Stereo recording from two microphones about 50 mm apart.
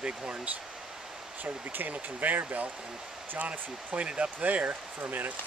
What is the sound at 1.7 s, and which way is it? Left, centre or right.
Speech, right.